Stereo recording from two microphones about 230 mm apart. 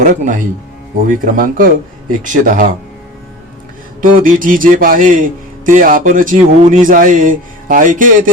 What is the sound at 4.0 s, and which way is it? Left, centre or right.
Speech, right.